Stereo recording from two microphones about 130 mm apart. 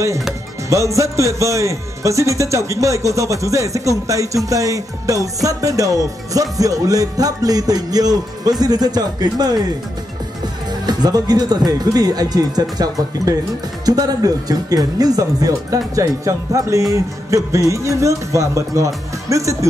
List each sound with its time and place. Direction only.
0.7 s speech: 25° right (ahead or behind)
10.7 s speech: 30° right (ahead or behind)